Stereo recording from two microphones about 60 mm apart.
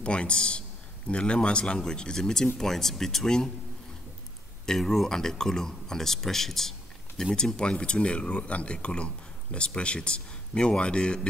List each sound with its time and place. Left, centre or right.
0.0 s a man's voice: centre
4.6 s speech: centre